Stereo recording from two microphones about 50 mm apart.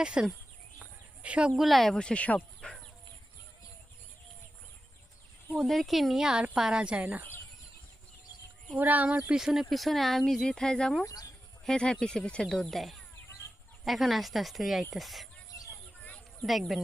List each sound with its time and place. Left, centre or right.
0.0 s a woman's voice: centre
1.5 s speech: centre
2.0 s speech: left
2.6 s a sound: left
5.6 s speech: centre
6.6 s a woman's voice: centre
8.8 s speech: right
9.3 s speech: centre
10.4 s speech: centre
16.5 s speech: centre